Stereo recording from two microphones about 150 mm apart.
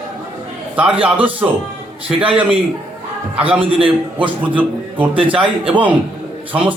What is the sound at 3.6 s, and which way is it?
Speech, 35° right (ahead or behind).